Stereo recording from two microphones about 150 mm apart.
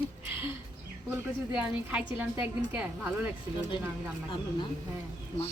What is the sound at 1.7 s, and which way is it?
A woman's voice, 10° right (ahead or behind).